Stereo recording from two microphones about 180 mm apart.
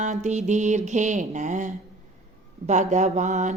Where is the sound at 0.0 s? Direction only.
40° right (ahead or behind).